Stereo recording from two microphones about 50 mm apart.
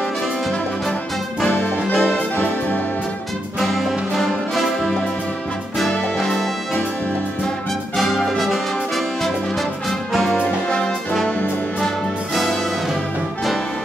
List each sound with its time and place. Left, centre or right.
1.5 s music: left
3.5 s music: centre
6.1 s music: centre
8.0 s brass instrument: centre
9.8 s music: centre